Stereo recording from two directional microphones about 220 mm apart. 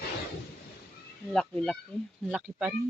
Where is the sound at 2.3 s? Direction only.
5° right (ahead or behind).